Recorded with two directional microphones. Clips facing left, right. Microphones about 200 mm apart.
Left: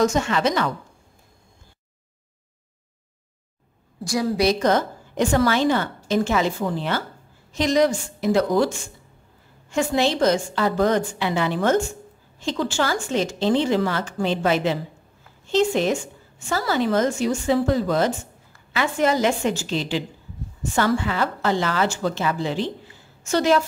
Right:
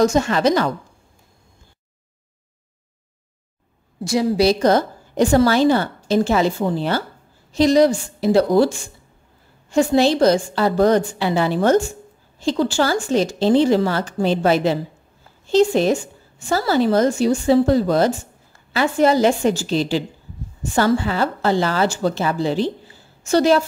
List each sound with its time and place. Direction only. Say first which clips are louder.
0.0 s a woman's voice: right 4 dB; 35° right (ahead or behind)
4.0 s a woman's voice: right 4 dB; 25° right (ahead or behind)